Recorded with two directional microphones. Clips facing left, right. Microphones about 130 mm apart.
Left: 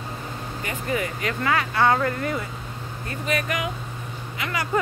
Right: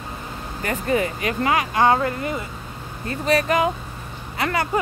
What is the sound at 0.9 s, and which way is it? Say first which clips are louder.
Speech: right 4 dB; 30° right (ahead or behind).